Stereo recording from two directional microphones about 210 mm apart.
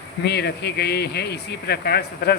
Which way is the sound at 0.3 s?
50° left (ahead or behind).